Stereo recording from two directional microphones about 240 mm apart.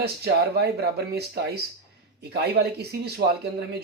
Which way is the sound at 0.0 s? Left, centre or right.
Right.